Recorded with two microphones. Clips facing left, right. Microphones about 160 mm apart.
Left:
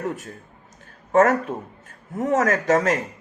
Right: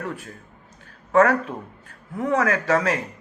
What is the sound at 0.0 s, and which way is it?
Speech, 40° left (ahead or behind).